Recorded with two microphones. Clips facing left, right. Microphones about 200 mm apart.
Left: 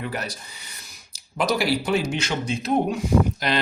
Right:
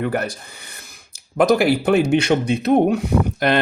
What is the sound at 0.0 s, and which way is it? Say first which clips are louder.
Speech: right 8 dB; 55° right (ahead or behind).